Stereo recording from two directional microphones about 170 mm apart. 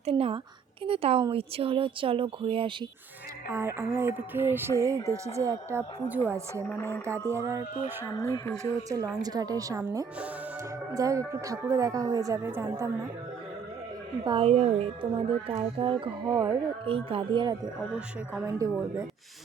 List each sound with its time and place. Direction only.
0.0 s a woman's voice: 35° right (ahead or behind)
3.5 s a woman's voice: 15° right (ahead or behind)
6.7 s speech: 15° left (ahead or behind)
7.3 s a woman's voice: 15° right (ahead or behind)
8.2 s speech: 15° left (ahead or behind)
8.9 s speech: 20° right (ahead or behind)
14.3 s a woman's voice: 35° right (ahead or behind)
16.8 s a woman's voice: 35° right (ahead or behind); by 19.0 s 20° right (ahead or behind)